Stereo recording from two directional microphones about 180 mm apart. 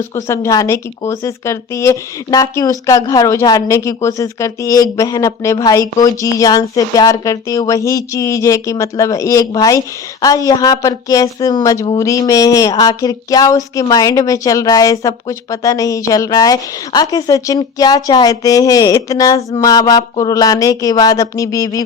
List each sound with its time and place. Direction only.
0.3 s speech: 15° left (ahead or behind)